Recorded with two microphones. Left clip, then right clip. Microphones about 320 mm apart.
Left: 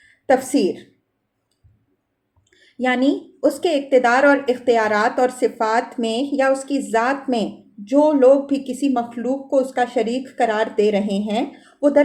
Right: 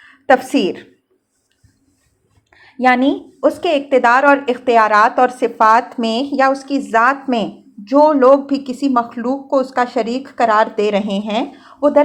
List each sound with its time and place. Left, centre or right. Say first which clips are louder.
0.3 s speech: right 4 dB; centre
2.5 s speech: right 8 dB; centre